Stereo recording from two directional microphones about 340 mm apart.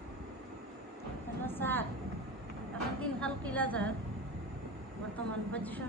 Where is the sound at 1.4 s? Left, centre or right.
Centre.